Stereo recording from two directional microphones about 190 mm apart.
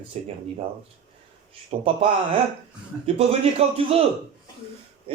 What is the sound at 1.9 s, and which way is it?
Speech, 30° right (ahead or behind).